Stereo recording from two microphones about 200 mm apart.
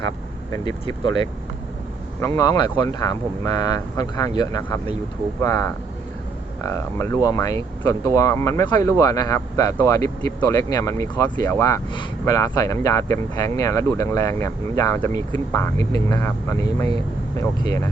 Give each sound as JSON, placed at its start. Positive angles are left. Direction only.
{"t": 0.6, "sound": "speech", "side_deg": 20}
{"t": 2.2, "sound": "speech", "side_deg": 15}